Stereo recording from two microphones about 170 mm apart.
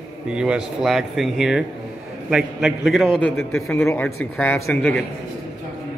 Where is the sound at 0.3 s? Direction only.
5° right (ahead or behind).